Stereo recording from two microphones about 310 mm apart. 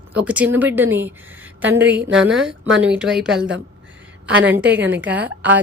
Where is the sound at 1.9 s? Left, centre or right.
Right.